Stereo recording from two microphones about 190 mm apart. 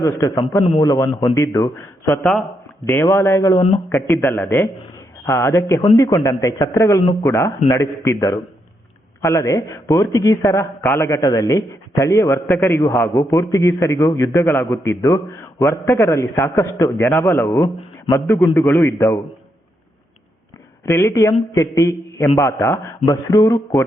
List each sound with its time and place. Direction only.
0.0 s speech: 15° left (ahead or behind)
20.8 s speech: 15° left (ahead or behind)